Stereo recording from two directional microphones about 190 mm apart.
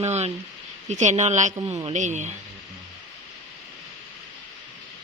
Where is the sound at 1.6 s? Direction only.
15° right (ahead or behind).